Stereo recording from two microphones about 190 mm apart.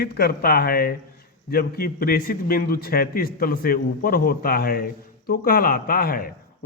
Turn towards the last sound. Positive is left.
turn(degrees=50)  # may be behind; listen again after turning